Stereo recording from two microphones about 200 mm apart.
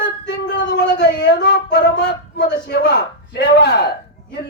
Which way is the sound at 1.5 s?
60° left (ahead or behind).